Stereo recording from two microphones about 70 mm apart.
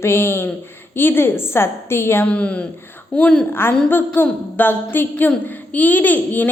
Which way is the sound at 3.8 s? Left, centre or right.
Left.